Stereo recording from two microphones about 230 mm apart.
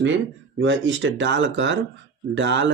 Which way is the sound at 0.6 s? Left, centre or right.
Right.